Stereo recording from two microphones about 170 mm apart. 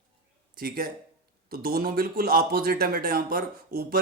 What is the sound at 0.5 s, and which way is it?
Speech, 60° right (ahead or behind).